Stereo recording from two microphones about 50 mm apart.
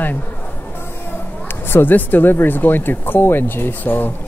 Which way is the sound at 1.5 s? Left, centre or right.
Left.